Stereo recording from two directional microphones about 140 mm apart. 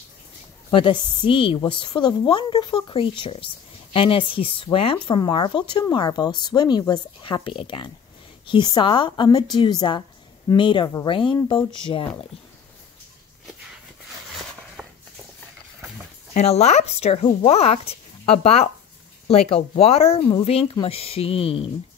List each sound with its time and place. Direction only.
0.7 s a woman's voice: 40° left (ahead or behind)
14.8 s a sound: 5° left (ahead or behind)
16.3 s speech: 50° left (ahead or behind)